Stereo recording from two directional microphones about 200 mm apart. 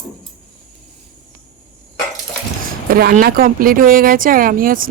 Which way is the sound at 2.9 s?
45° right (ahead or behind).